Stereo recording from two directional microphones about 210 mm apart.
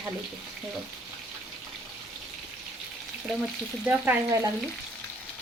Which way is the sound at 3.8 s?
10° right (ahead or behind).